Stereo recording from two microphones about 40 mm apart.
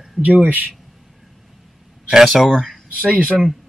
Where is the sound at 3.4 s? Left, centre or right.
Centre.